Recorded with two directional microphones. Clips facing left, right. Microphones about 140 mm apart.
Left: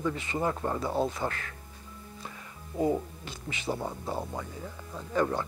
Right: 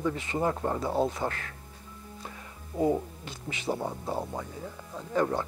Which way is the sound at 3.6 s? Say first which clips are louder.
Right 2 dB; 20° right (ahead or behind).